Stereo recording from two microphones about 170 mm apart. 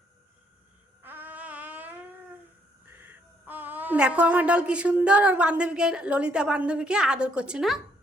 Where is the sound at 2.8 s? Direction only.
10° right (ahead or behind).